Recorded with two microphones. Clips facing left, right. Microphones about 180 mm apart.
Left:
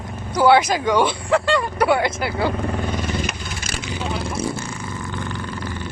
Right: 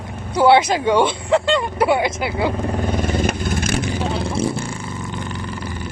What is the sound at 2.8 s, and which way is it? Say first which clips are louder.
Vehicle: right 4 dB; 50° right (ahead or behind).